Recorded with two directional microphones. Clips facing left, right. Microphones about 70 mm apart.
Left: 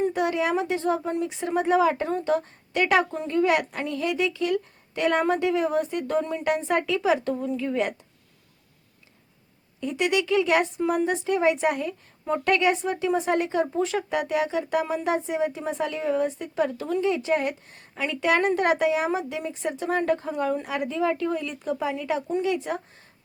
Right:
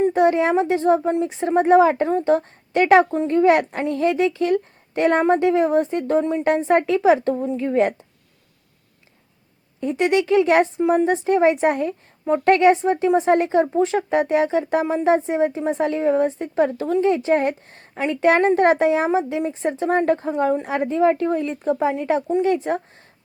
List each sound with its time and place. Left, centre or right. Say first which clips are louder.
0.0 s speech: right 7 dB; right
9.8 s speech: right 6 dB; right